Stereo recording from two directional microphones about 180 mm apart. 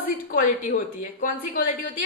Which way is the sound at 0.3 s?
50° left (ahead or behind).